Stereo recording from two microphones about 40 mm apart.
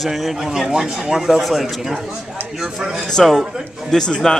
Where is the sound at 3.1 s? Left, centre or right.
Centre.